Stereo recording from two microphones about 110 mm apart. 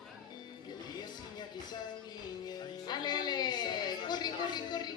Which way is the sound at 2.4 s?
40° left (ahead or behind).